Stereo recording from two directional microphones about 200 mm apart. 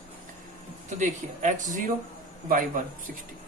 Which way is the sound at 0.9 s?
40° right (ahead or behind).